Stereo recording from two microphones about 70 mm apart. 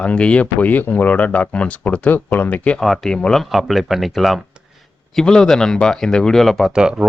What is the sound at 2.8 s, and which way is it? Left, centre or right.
Speech, centre.